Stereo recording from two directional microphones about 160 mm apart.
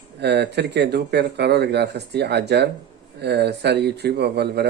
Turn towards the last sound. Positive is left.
turn(degrees=-90)